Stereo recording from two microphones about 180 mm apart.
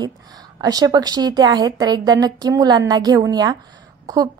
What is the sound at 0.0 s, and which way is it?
A woman's voice, 20° right (ahead or behind).